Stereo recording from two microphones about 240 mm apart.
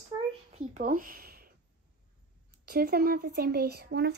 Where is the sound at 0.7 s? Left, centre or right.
Right.